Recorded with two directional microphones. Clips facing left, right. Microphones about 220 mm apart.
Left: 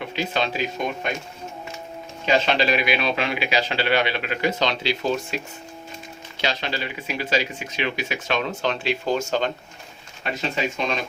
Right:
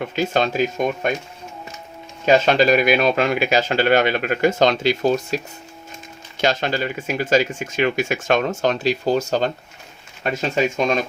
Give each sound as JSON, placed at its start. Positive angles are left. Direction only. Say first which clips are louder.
{"t": 0.0, "sound": "a man's voice", "louder": "right 5 dB", "side_deg": -45}
{"t": 2.2, "sound": "a man's voice", "louder": "right 6 dB", "side_deg": -45}
{"t": 6.4, "sound": "a man's voice", "louder": "right 7 dB", "side_deg": -50}